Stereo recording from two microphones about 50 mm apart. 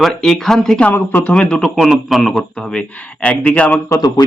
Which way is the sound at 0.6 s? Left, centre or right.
Centre.